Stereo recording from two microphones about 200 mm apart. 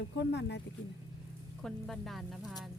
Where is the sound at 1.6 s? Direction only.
Centre (ahead or behind).